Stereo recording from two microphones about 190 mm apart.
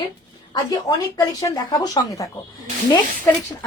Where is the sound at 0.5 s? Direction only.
20° left (ahead or behind).